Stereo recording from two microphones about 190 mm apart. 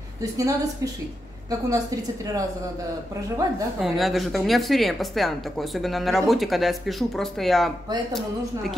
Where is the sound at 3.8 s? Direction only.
Centre (ahead or behind).